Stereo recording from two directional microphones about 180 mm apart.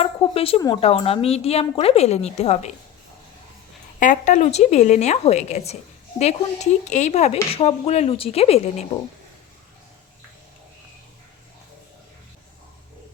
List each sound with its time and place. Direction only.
0.0 s a sound: 30° left (ahead or behind)
0.8 s speech: 35° left (ahead or behind)
4.0 s speech: 45° left (ahead or behind)